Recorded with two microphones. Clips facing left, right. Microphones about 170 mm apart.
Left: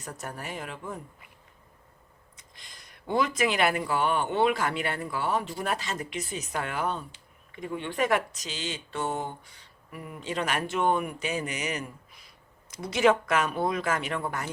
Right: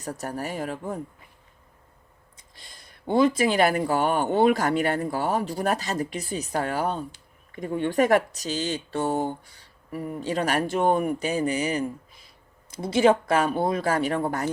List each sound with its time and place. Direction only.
0.0 s speech: 35° right (ahead or behind)
2.3 s speech: 30° right (ahead or behind)